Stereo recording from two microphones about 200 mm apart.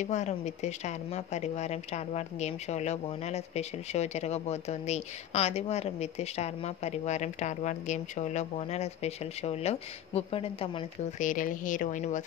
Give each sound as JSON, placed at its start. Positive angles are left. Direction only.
{"t": 0.0, "sound": "speech", "side_deg": 35}
{"t": 11.1, "sound": "speech", "side_deg": 40}